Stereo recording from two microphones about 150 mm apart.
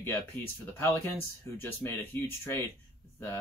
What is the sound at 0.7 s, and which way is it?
Speech, 15° left (ahead or behind).